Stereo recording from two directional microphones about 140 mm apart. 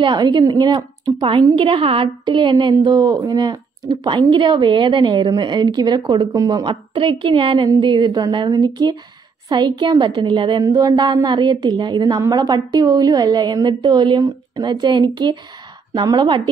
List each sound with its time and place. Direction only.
0.0 s a woman's voice: 30° right (ahead or behind)